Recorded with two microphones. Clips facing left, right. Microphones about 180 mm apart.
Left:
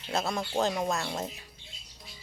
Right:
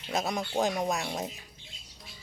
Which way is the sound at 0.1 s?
15° right (ahead or behind).